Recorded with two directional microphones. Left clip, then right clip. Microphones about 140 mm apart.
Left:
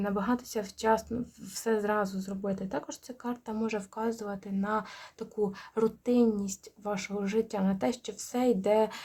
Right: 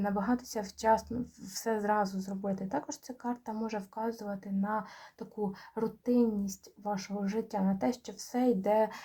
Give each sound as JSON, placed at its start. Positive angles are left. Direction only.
{"t": 0.0, "sound": "speech", "side_deg": 35}